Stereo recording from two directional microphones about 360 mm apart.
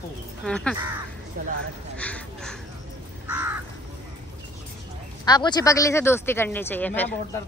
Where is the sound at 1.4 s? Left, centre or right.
Right.